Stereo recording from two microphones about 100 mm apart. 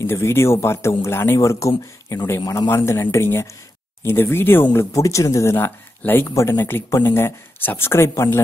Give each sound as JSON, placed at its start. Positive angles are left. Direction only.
{"t": 0.0, "sound": "speech", "side_deg": 25}